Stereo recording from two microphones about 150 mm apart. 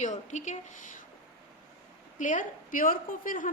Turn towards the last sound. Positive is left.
turn(degrees=60)  # may be behind; listen again after turning